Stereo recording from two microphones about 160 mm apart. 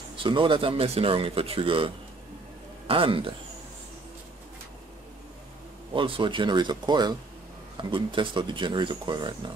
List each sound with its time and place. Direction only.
0.1 s speech: 30° right (ahead or behind)
2.9 s speech: 35° right (ahead or behind)
5.9 s speech: 30° right (ahead or behind)